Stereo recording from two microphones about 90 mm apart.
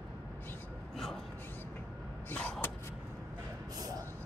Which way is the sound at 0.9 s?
5° left (ahead or behind).